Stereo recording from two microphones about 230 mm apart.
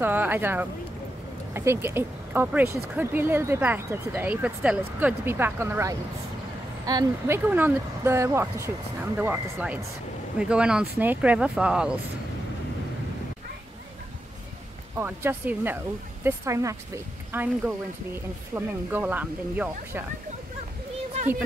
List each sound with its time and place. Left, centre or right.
0.0 s speech: centre
15.0 s speech: centre